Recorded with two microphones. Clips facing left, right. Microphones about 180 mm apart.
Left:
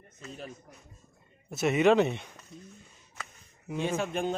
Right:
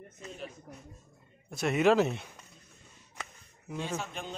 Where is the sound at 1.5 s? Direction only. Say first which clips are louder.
Left 2 dB; centre (ahead or behind).